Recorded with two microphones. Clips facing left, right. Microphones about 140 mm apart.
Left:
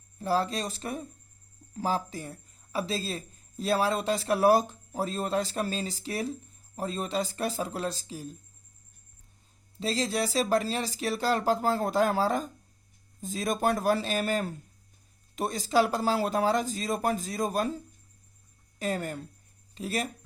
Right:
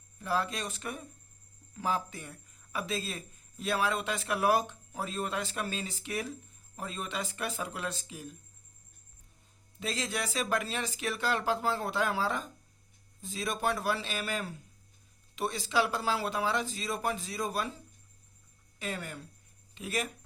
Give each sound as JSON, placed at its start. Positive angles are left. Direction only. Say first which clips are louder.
{"t": 0.2, "sound": "speech", "louder": "left 5 dB", "side_deg": 35}
{"t": 9.8, "sound": "speech", "louder": "left 6 dB", "side_deg": 35}
{"t": 18.8, "sound": "speech", "louder": "left 7 dB", "side_deg": 40}